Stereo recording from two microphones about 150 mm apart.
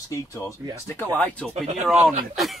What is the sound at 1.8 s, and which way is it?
Speech, 5° right (ahead or behind).